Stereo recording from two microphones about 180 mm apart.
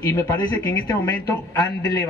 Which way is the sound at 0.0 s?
15° left (ahead or behind).